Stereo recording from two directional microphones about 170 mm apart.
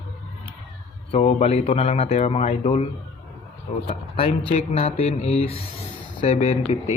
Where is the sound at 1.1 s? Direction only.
40° left (ahead or behind).